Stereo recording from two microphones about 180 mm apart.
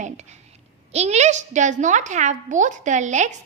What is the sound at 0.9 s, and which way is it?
A woman's voice, 35° right (ahead or behind).